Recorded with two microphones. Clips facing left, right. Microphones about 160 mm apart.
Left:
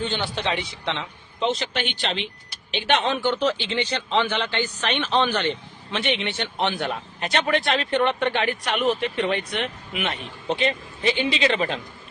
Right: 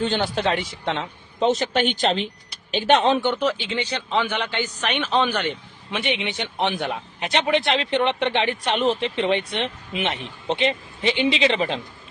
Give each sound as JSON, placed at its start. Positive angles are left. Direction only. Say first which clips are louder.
{"t": 0.0, "sound": "speech", "louder": "right 4 dB", "side_deg": -40}
{"t": 3.4, "sound": "a man's voice", "louder": "even", "side_deg": -10}